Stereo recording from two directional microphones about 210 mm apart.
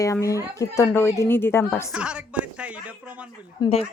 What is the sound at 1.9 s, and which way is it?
Speech, 5° right (ahead or behind).